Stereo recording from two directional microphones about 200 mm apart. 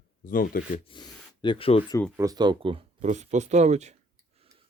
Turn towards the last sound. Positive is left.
turn(degrees=-35)  # may be behind; listen again after turning